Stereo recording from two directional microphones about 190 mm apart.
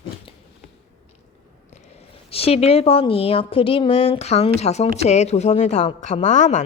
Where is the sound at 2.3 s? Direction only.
30° left (ahead or behind).